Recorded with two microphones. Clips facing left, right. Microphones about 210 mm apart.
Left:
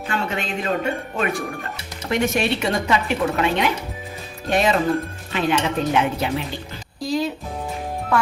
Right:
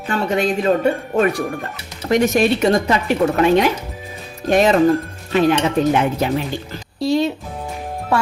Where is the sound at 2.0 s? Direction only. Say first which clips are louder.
Right 6 dB; 40° right (ahead or behind).